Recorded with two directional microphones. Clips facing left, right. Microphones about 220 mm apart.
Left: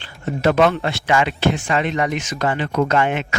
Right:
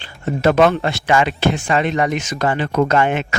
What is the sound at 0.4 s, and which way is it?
Speech, 45° right (ahead or behind).